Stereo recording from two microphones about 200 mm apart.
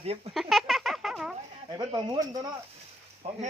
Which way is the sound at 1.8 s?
20° right (ahead or behind).